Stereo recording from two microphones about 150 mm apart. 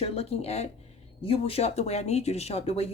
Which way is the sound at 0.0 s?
45° left (ahead or behind).